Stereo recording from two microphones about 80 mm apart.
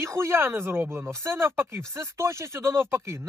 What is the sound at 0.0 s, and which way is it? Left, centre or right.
A man's voice, right.